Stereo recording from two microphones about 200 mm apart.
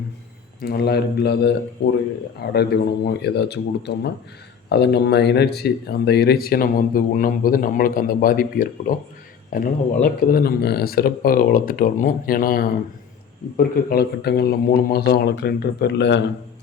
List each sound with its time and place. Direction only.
0.6 s speech: 50° left (ahead or behind)